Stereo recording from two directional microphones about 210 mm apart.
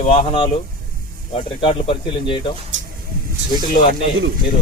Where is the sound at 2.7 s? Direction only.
60° right (ahead or behind).